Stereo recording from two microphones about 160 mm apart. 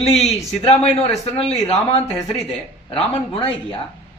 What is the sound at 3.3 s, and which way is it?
Speech, 35° left (ahead or behind).